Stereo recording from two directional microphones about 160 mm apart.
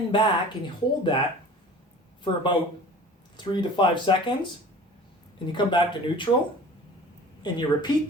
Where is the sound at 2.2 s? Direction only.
30° left (ahead or behind).